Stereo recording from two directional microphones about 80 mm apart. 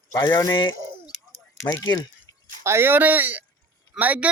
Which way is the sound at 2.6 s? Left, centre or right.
Right.